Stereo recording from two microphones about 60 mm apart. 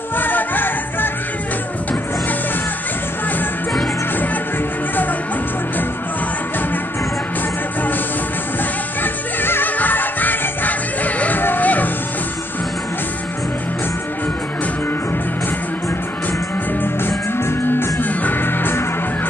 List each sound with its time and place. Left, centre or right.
0.2 s music: left
9.0 s music: left
16.8 s music: left